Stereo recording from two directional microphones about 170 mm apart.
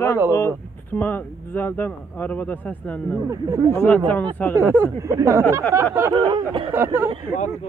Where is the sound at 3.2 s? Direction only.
15° right (ahead or behind).